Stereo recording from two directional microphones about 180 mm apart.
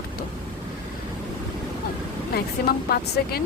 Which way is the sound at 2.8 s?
60° left (ahead or behind).